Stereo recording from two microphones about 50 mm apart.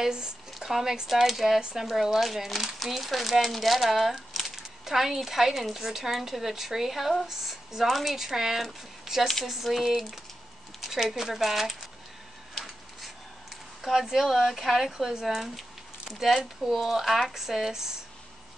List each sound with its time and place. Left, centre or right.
0.0 s speech: centre
1.6 s speech: centre
13.8 s speech: centre